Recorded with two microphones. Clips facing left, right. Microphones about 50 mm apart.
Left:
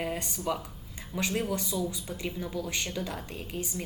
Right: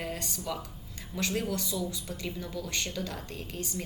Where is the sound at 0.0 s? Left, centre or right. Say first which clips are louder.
Left 4 dB; centre.